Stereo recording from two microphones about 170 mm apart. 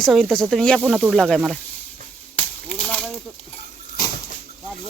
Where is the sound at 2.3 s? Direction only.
5° left (ahead or behind).